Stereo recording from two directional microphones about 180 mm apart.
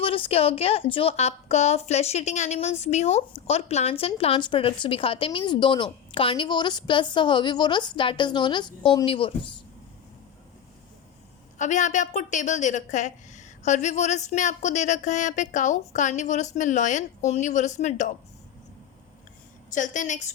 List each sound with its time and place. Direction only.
0.0 s a woman's voice: 30° left (ahead or behind)
11.5 s a woman's voice: 40° left (ahead or behind)
19.7 s a woman's voice: 45° left (ahead or behind)